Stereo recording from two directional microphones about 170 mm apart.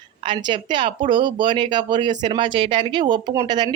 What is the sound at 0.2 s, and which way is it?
Speech, 30° right (ahead or behind).